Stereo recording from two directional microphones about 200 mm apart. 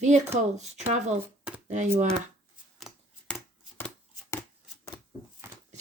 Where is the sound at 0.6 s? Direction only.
35° right (ahead or behind).